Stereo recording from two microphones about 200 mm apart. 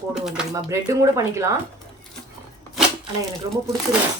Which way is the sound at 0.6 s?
15° right (ahead or behind).